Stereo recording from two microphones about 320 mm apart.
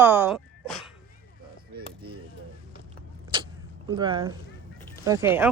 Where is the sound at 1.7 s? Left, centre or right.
Right.